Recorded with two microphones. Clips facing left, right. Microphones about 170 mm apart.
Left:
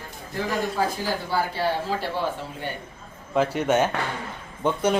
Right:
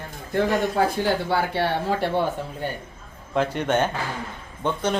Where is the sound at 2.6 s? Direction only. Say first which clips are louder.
Right 3 dB; 45° right (ahead or behind).